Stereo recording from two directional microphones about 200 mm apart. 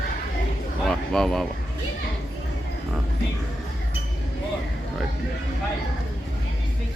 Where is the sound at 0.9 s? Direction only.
5° left (ahead or behind).